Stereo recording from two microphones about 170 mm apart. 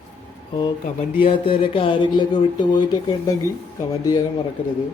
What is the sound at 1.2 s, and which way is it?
Speech, 30° left (ahead or behind).